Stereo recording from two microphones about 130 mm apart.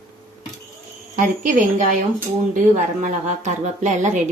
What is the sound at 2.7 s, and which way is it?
A woman's voice, 70° right (ahead or behind).